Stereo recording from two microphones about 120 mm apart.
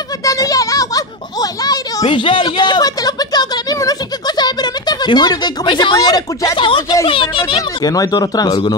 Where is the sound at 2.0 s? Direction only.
45° left (ahead or behind).